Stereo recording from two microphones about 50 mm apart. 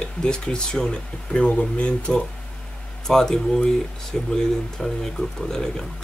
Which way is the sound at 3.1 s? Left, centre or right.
Centre.